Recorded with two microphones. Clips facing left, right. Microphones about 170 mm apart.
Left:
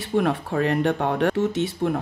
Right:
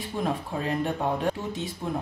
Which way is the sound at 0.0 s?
75° left (ahead or behind).